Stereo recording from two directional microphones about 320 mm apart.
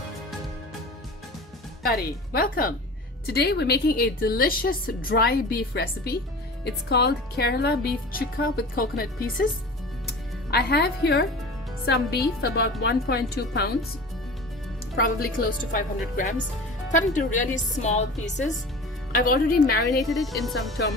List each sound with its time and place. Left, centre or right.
1.8 s a woman's voice: left
12.8 s speech: left
15.0 s a woman's voice: left
19.9 s a woman's voice: centre